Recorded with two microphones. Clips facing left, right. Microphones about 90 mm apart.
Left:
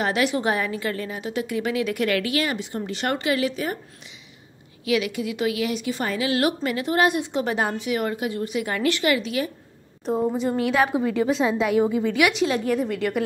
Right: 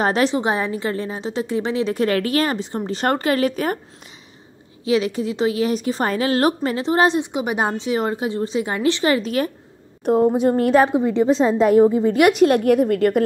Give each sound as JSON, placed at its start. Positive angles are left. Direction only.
{"t": 0.0, "sound": "a woman's voice", "side_deg": -35}
{"t": 0.4, "sound": "a woman's voice", "side_deg": -25}
{"t": 4.8, "sound": "a woman's voice", "side_deg": -30}
{"t": 10.0, "sound": "a woman's voice", "side_deg": -55}
{"t": 10.9, "sound": "a woman's voice", "side_deg": -20}